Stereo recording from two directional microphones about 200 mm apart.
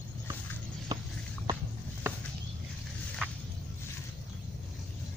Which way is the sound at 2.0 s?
10° right (ahead or behind).